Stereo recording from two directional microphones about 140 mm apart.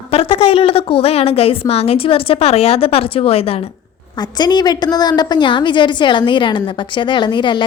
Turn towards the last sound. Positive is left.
turn(degrees=35)  # may be behind; listen again after turning